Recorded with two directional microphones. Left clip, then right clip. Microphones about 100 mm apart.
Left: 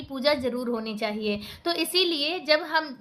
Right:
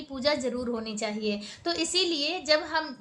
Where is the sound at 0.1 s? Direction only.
30° left (ahead or behind).